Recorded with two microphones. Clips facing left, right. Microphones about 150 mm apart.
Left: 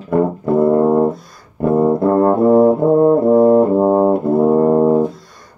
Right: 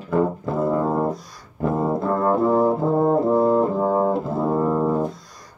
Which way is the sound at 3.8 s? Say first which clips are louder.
Left 7 dB; 30° left (ahead or behind).